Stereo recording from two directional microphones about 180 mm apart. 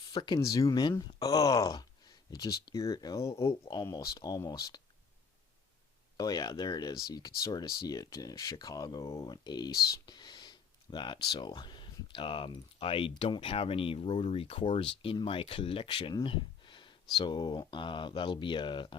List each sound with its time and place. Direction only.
0.1 s speech: 25° left (ahead or behind)
6.1 s speech: 20° left (ahead or behind)